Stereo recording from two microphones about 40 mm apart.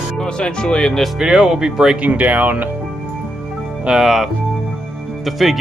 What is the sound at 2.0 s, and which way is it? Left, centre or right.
Speech, right.